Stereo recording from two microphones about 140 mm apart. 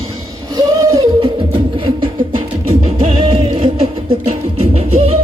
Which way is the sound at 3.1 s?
35° right (ahead or behind).